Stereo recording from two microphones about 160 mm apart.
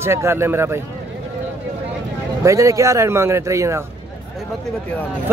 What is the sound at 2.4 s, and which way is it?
Speech, 20° right (ahead or behind).